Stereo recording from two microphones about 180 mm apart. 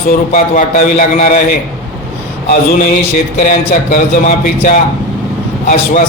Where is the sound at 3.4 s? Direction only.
45° left (ahead or behind).